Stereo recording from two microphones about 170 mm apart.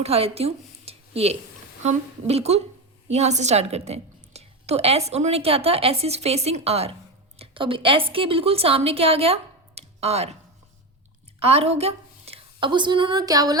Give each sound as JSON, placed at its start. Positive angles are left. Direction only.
{"t": 0.0, "sound": "a woman's voice", "side_deg": -35}
{"t": 11.3, "sound": "a woman's voice", "side_deg": -35}